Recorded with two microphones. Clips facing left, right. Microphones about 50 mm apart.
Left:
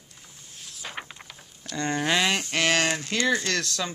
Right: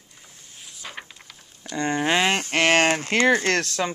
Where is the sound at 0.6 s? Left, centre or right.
Centre.